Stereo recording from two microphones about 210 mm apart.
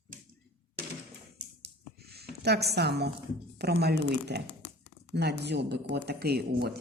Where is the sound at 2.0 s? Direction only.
50° right (ahead or behind).